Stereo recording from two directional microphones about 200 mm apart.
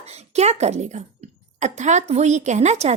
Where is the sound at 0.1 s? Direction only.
35° right (ahead or behind).